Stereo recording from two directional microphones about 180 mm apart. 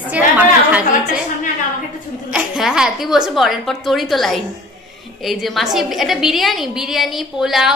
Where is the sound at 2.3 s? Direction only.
5° right (ahead or behind).